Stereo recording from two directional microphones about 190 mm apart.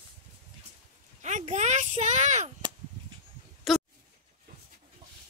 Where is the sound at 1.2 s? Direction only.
40° right (ahead or behind).